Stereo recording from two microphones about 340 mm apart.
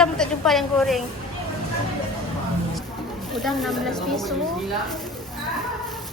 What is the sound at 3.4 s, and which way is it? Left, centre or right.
Speech, centre.